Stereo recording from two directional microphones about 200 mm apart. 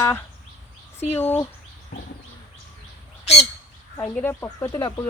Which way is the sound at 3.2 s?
30° left (ahead or behind).